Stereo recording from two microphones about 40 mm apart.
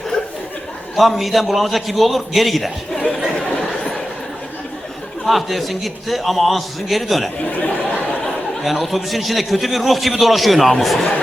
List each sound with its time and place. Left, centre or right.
0.9 s a man's voice: centre
5.2 s a man's voice: centre
7.4 s a sound: left
8.6 s a man's voice: centre